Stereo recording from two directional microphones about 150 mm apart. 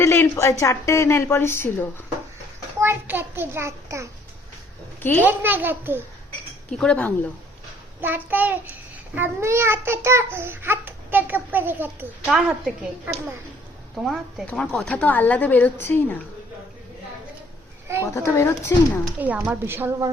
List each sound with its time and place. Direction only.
0.0 s speech: 15° left (ahead or behind)
2.8 s a child's voice: 15° right (ahead or behind)
5.2 s a child's voice: 10° right (ahead or behind)
6.7 s speech: 5° left (ahead or behind)
8.0 s a child's voice: 10° right (ahead or behind)
13.9 s speech: centre (ahead or behind)
18.0 s speech: 20° left (ahead or behind)
19.2 s a child's voice: 10° right (ahead or behind)